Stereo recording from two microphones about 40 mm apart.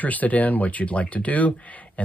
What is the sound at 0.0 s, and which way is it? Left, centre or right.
Speech, left.